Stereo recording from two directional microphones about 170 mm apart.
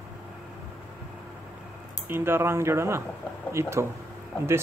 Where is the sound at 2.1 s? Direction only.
15° right (ahead or behind).